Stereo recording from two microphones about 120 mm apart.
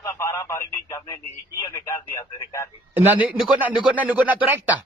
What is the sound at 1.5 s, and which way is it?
Speech, 25° left (ahead or behind).